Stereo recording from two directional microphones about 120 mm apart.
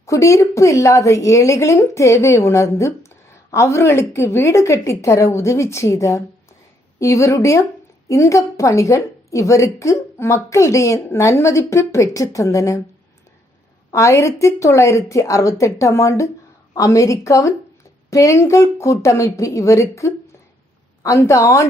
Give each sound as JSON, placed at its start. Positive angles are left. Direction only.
{"t": 0.0, "sound": "a woman's voice", "side_deg": 25}
{"t": 13.9, "sound": "a woman's voice", "side_deg": 25}